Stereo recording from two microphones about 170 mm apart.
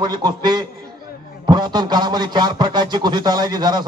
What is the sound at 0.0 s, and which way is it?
Speech, 25° right (ahead or behind).